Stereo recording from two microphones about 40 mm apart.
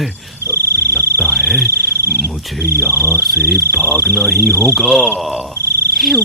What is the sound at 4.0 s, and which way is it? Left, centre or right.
Speech, centre.